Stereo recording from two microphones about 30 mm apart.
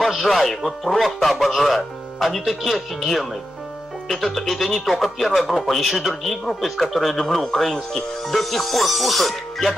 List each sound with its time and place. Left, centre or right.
0.3 s speech: centre